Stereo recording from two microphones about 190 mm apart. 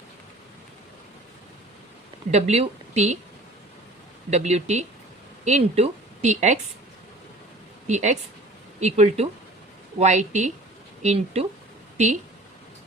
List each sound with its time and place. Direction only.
2.3 s speech: 35° right (ahead or behind)
4.3 s a woman's voice: 35° right (ahead or behind)
7.9 s speech: 40° right (ahead or behind)